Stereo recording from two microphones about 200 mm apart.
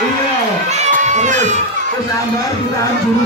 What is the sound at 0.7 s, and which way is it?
Crowd, 35° right (ahead or behind).